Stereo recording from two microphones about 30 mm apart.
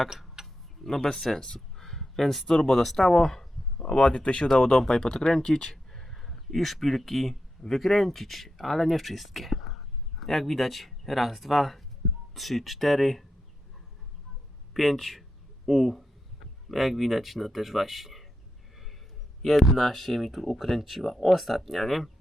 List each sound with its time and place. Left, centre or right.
0.4 s tick-tock: centre
0.9 s speech: centre
1.5 s a sound: centre
2.6 s speech: centre
3.8 s speech: left
4.1 s speech: left
4.4 s speech: centre
5.6 s a sound: centre
7.7 s speech: centre
14.7 s a man's voice: centre
19.5 s speech: centre